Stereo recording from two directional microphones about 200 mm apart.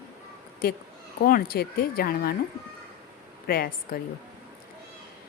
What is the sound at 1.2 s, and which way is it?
A woman's voice, 45° left (ahead or behind).